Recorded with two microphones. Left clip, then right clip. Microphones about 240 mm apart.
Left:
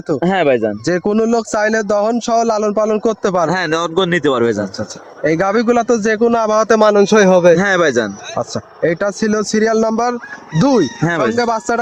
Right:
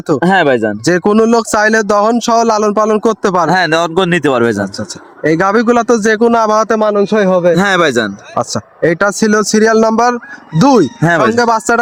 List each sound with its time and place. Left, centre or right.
0.2 s speech: right
0.9 s speech: right
3.5 s speech: right
4.8 s speech: right
6.7 s a man's voice: centre
7.5 s speech: right
8.4 s speech: right